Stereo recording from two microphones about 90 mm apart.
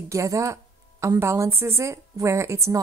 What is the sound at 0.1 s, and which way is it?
Speech, 35° right (ahead or behind).